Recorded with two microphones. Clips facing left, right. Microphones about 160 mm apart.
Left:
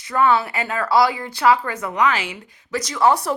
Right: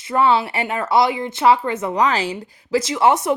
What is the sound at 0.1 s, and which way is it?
A woman's voice, 20° right (ahead or behind).